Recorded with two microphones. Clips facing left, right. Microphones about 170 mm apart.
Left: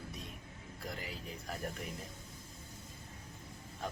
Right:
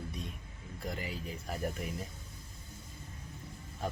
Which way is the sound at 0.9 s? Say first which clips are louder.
Right 5 dB; centre (ahead or behind).